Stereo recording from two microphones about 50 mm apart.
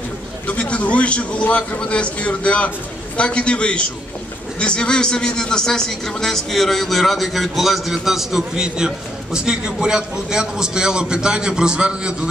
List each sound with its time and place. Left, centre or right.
0.5 s a man's voice: left; by 12.2 s centre